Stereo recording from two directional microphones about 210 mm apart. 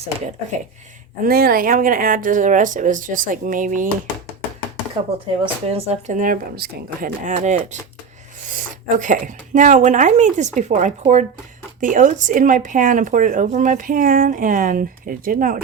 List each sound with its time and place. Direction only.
1.2 s speech: 45° right (ahead or behind)
5.6 s speech: 30° right (ahead or behind)
9.0 s speech: 40° right (ahead or behind)